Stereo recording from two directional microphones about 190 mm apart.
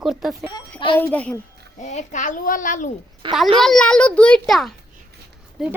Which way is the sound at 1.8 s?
40° left (ahead or behind).